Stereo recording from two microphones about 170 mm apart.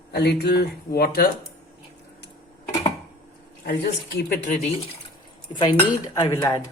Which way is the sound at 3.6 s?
75° left (ahead or behind).